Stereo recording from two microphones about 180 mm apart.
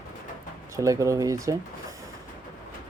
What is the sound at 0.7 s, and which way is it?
Speech, 15° right (ahead or behind).